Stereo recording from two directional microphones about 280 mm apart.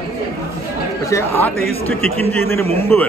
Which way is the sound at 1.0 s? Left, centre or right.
Centre.